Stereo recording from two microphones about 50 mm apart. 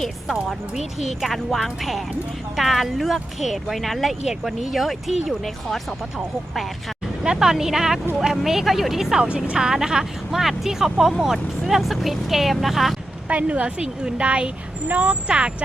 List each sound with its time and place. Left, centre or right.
0.8 s speech: centre
7.2 s a woman's voice: centre
9.2 s a woman's voice: right; by 13.0 s centre
13.2 s a woman's voice: right